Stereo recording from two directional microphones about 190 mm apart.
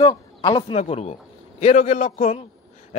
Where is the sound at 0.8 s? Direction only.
35° left (ahead or behind).